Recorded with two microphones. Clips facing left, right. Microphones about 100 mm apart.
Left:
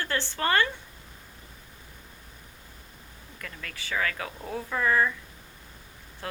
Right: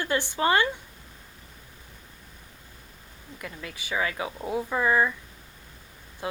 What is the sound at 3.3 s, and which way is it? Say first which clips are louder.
A woman's voice: right 3 dB; 15° right (ahead or behind).